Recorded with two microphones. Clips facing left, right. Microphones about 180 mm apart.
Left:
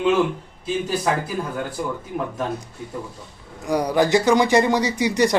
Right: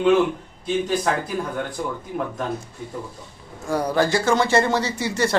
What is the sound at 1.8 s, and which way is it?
Speech, 5° left (ahead or behind).